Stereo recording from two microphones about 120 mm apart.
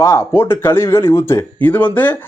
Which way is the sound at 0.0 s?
25° left (ahead or behind).